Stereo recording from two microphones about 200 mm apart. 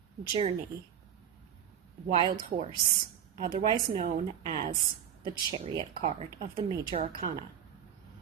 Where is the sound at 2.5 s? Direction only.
30° right (ahead or behind).